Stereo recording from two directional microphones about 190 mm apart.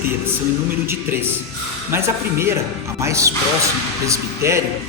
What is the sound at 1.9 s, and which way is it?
A man's voice, 15° right (ahead or behind).